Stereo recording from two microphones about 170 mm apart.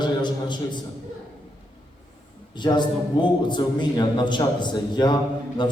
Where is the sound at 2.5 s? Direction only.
25° left (ahead or behind).